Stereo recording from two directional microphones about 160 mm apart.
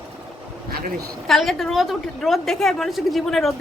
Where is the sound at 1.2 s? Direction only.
Centre (ahead or behind).